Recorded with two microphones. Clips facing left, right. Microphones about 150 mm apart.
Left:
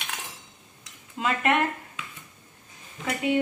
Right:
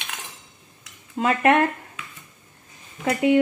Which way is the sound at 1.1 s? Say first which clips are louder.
Right 6 dB; 45° right (ahead or behind).